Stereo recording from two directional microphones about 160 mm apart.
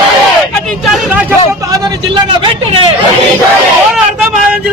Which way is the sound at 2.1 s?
30° right (ahead or behind).